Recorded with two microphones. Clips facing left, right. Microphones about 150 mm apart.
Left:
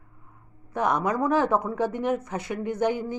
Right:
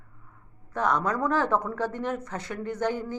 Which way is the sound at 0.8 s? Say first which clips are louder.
Left 2 dB; 10° left (ahead or behind).